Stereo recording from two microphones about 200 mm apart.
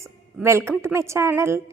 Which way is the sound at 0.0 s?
15° right (ahead or behind).